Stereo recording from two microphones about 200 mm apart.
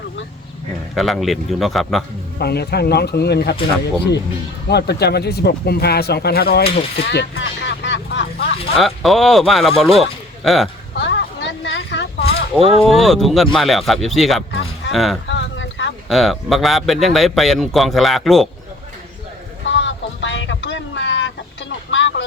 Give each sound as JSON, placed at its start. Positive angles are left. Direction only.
{"t": 0.9, "sound": "a man's voice", "side_deg": 0}
{"t": 2.4, "sound": "speech", "side_deg": 55}
{"t": 4.7, "sound": "speech", "side_deg": 55}
{"t": 6.9, "sound": "vehicle", "side_deg": 55}
{"t": 8.7, "sound": "a man's voice", "side_deg": 0}
{"t": 10.9, "sound": "a sound", "side_deg": 65}
{"t": 12.5, "sound": "speech", "side_deg": -30}
{"t": 12.8, "sound": "a man's voice", "side_deg": 0}
{"t": 15.3, "sound": "a sound", "side_deg": 65}
{"t": 16.0, "sound": "a man's voice", "side_deg": 0}
{"t": 19.6, "sound": "a sound", "side_deg": 65}